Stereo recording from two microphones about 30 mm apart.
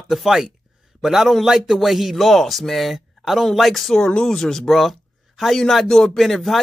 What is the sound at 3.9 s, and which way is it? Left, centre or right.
Speech, left.